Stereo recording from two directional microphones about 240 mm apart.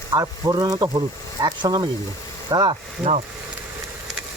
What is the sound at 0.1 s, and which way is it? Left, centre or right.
Speech, centre.